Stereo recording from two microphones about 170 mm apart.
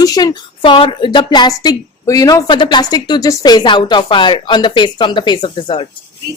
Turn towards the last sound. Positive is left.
turn(degrees=30)  # may be behind; listen again after turning